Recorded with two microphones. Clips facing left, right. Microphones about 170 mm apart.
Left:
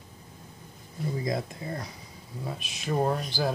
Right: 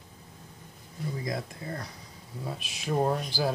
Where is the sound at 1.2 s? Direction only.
20° left (ahead or behind).